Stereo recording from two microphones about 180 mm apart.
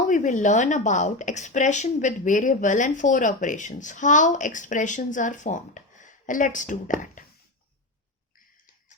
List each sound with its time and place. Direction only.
0.1 s a woman's voice: 45° left (ahead or behind)